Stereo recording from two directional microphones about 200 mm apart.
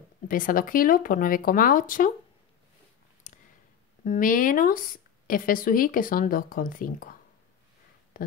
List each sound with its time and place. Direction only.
0.3 s a woman's voice: 45° left (ahead or behind)
3.3 s a sound: 40° left (ahead or behind)
4.0 s a woman's voice: 40° left (ahead or behind)